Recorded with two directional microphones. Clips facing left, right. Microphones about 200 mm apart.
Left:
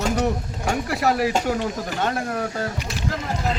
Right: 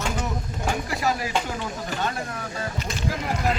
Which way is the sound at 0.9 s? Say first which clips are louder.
Left 7 dB; 65° left (ahead or behind).